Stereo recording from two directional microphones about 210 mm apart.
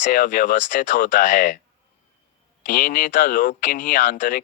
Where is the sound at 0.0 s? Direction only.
40° left (ahead or behind).